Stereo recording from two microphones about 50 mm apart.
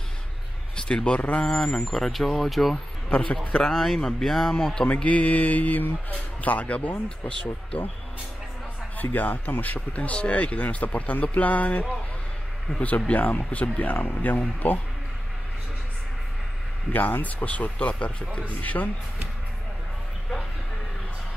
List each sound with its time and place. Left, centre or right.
0.7 s speech: centre
1.9 s speech: centre
3.1 s a man's voice: left
3.6 s speech: centre
4.8 s speech: left
8.9 s speech: left
13.0 s speech: left
16.9 s speech: left
18.5 s speech: left